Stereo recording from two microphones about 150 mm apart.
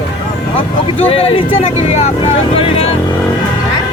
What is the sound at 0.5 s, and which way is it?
Speech, 40° left (ahead or behind).